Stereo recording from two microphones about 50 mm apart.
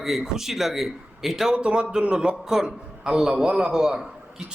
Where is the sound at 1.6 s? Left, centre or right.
Centre.